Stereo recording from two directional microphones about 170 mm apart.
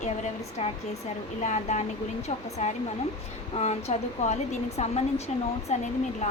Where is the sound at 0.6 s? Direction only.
40° left (ahead or behind).